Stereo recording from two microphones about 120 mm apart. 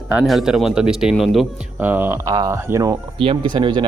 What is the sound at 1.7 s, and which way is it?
Speech, 15° right (ahead or behind).